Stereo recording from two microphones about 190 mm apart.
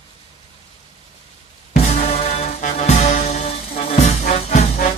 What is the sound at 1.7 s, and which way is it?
Music, 40° left (ahead or behind).